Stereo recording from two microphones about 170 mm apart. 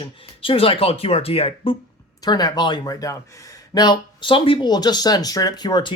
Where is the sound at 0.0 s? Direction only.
35° left (ahead or behind).